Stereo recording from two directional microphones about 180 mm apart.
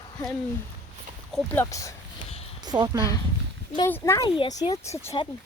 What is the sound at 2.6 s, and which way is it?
Speech, 20° right (ahead or behind).